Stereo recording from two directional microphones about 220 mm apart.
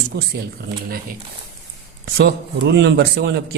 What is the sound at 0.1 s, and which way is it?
Speech, 45° right (ahead or behind).